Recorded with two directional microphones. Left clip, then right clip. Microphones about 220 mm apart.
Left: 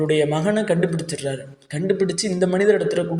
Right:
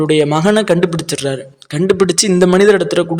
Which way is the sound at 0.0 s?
30° right (ahead or behind).